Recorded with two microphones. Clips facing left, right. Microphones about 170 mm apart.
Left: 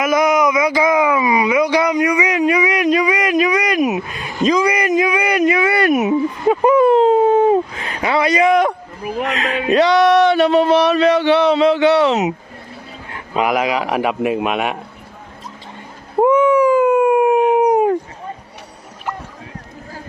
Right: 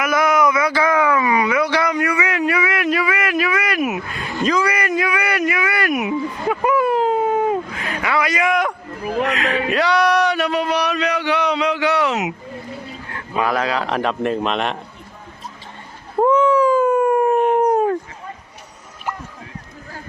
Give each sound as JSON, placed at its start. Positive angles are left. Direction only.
{"t": 0.0, "sound": "a sound", "side_deg": 20}
{"t": 13.1, "sound": "a man's voice", "side_deg": 15}
{"t": 16.2, "sound": "cat", "side_deg": 10}